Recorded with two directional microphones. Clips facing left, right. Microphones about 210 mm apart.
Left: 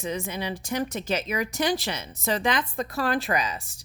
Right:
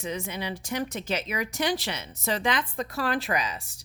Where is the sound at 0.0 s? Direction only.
45° left (ahead or behind).